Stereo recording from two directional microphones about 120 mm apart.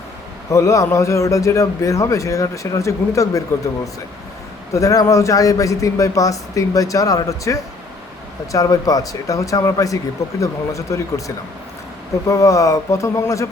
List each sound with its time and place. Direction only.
0.5 s a man's voice: 25° left (ahead or behind)
4.7 s a man's voice: 25° left (ahead or behind)
12.3 s a man's voice: 25° left (ahead or behind)